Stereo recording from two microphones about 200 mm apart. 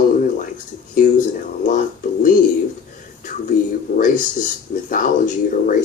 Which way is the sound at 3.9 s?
45° left (ahead or behind).